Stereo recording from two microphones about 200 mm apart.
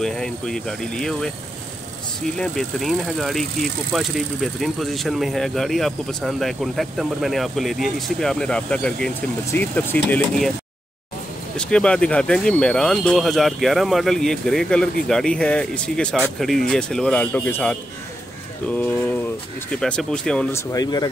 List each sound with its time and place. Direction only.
0.0 s speech: centre (ahead or behind)
2.3 s speech: 5° left (ahead or behind)
11.5 s speech: 5° left (ahead or behind)
20.7 s speech: 20° left (ahead or behind)